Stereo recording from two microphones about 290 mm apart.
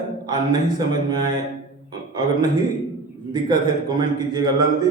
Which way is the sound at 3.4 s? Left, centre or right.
Centre.